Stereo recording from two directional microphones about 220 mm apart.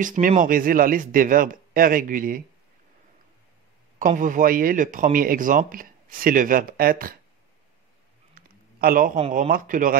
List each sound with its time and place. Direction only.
0.0 s speech: 35° right (ahead or behind)
4.0 s speech: 35° right (ahead or behind)
8.4 s a sound: 40° right (ahead or behind)
9.3 s speech: 40° right (ahead or behind)